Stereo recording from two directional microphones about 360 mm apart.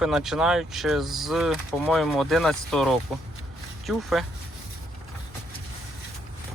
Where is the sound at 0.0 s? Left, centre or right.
Centre.